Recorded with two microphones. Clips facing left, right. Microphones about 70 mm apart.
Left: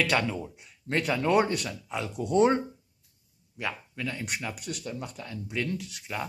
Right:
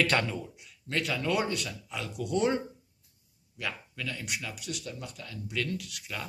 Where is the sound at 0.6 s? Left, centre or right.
Left.